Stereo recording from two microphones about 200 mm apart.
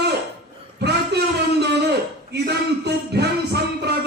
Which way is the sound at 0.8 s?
55° right (ahead or behind).